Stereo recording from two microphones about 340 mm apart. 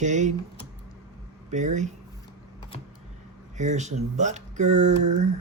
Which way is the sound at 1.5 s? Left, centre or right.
Right.